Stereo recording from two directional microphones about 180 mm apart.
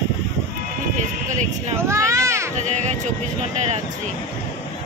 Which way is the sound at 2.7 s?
40° right (ahead or behind).